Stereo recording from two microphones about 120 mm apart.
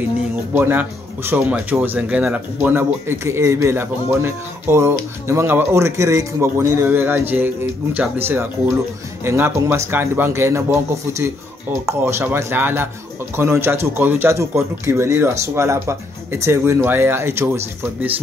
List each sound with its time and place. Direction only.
0.5 s speech: 15° right (ahead or behind)